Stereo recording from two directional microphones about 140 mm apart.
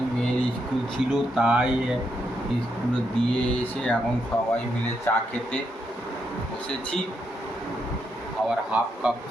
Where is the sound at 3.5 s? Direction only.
10° left (ahead or behind).